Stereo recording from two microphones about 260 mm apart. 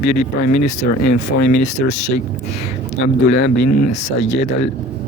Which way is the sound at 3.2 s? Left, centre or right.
Left.